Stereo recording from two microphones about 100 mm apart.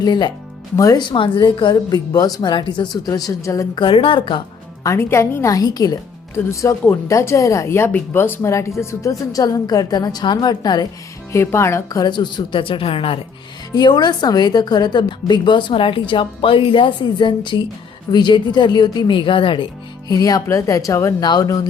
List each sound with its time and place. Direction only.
0.0 s a woman's voice: 45° left (ahead or behind)
1.7 s a woman's voice: 40° left (ahead or behind)
3.2 s speech: 35° left (ahead or behind)
3.8 s a woman's voice: 60° left (ahead or behind)
4.8 s a woman's voice: 30° left (ahead or behind)
11.3 s speech: 25° left (ahead or behind)
11.9 s a woman's voice: 45° left (ahead or behind); by 13.1 s 70° left (ahead or behind)
13.7 s a woman's voice: 45° left (ahead or behind)
20.1 s speech: 40° left (ahead or behind)
21.2 s a woman's voice: 45° left (ahead or behind)